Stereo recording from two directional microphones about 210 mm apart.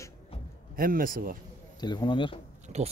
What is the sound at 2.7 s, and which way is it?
Speech, 30° right (ahead or behind).